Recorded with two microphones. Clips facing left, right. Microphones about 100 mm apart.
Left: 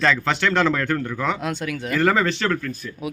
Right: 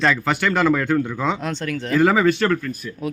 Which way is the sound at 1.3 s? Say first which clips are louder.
Right 1 dB; 5° left (ahead or behind).